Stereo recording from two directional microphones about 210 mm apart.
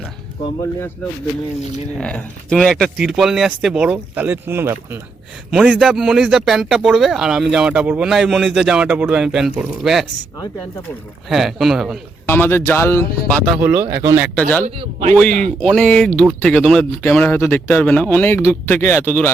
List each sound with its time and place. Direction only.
2.0 s speech: 5° left (ahead or behind)
11.3 s speech: centre (ahead or behind)
12.2 s speech: 10° left (ahead or behind)
13.6 s speech: 10° right (ahead or behind)
15.1 s speech: 5° left (ahead or behind)